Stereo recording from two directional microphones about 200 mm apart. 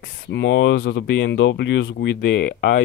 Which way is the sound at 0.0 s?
60° left (ahead or behind).